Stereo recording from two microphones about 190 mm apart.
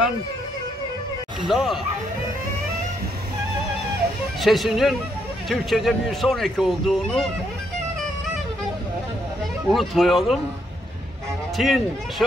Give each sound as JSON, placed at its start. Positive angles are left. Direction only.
{"t": 1.5, "sound": "speech", "side_deg": 0}
{"t": 4.4, "sound": "speech", "side_deg": 0}
{"t": 9.7, "sound": "speech", "side_deg": 0}
{"t": 11.5, "sound": "speech", "side_deg": 0}